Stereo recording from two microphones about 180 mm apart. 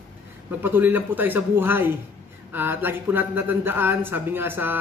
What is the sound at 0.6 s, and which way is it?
Speech, 10° right (ahead or behind).